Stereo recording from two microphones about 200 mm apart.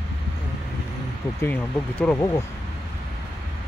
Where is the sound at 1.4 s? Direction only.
10° left (ahead or behind).